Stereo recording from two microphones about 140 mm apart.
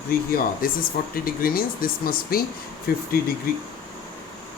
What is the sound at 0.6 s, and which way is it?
Speech, 90° left.